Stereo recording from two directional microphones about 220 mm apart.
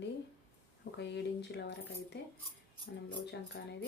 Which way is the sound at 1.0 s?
50° left (ahead or behind).